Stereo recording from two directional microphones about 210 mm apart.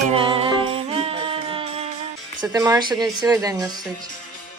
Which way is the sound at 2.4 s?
15° right (ahead or behind).